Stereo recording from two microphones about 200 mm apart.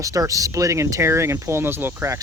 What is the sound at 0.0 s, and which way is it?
Speech, 15° right (ahead or behind).